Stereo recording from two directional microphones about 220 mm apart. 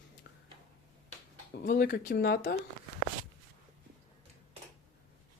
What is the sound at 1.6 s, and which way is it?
Speech, 40° left (ahead or behind).